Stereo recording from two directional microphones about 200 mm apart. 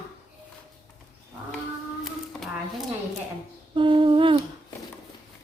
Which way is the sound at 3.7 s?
25° right (ahead or behind).